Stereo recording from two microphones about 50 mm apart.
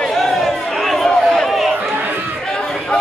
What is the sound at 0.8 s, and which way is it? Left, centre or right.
Chatter, centre.